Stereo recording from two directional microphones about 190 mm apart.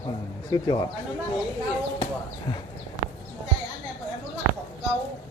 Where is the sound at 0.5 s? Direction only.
20° left (ahead or behind).